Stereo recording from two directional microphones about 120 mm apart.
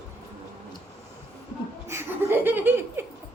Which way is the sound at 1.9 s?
20° right (ahead or behind).